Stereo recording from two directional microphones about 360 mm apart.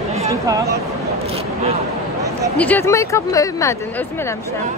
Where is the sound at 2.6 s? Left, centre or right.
Centre.